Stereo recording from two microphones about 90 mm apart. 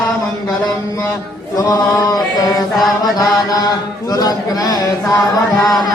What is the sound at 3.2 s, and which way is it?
Chant, 45° left (ahead or behind).